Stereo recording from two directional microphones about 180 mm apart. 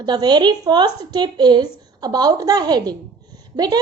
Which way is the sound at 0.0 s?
25° right (ahead or behind).